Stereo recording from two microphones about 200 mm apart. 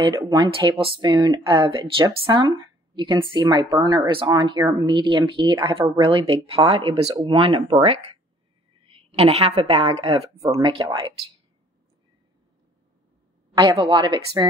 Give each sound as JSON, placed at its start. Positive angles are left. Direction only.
{"t": 0.0, "sound": "a woman's voice", "side_deg": -20}
{"t": 10.3, "sound": "speech", "side_deg": -15}
{"t": 13.6, "sound": "speech", "side_deg": -25}